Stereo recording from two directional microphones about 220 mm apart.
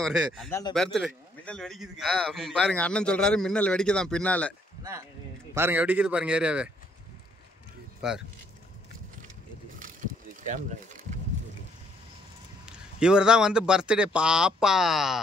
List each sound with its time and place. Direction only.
0.0 s a man's voice: centre (ahead or behind)
0.5 s speech: 15° left (ahead or behind)
0.9 s a man's voice: 5° left (ahead or behind)
5.5 s a man's voice: 10° right (ahead or behind)
8.0 s a man's voice: 5° right (ahead or behind)
10.4 s speech: 35° right (ahead or behind)
12.6 s a man's voice: 5° right (ahead or behind)